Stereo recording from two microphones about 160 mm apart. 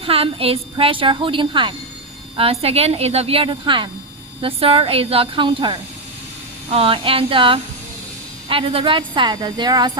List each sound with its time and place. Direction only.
0.0 s a woman's voice: 35° right (ahead or behind)